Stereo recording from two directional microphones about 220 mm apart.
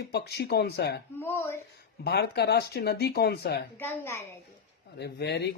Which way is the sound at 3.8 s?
10° left (ahead or behind).